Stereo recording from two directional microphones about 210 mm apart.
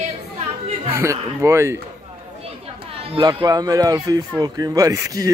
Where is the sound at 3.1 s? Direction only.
20° right (ahead or behind).